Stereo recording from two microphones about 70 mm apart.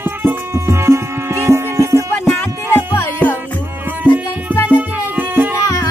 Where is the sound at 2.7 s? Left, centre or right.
Left.